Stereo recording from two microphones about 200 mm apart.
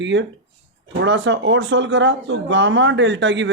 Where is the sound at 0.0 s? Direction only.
65° right (ahead or behind).